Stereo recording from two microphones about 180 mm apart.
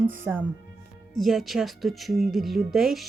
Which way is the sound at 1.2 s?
Centre (ahead or behind).